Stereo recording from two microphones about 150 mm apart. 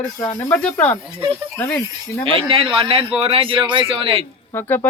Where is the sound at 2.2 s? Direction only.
35° right (ahead or behind).